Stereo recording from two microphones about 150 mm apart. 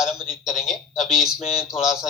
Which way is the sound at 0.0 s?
5° right (ahead or behind).